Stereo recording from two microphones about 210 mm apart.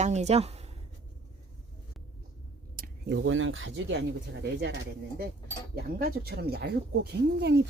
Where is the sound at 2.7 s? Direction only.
50° right (ahead or behind).